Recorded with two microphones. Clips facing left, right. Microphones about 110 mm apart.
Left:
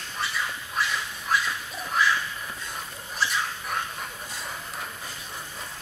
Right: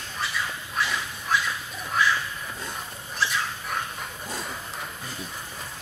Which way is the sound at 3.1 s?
Centre (ahead or behind).